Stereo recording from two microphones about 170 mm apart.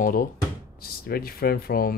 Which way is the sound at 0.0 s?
55° left (ahead or behind).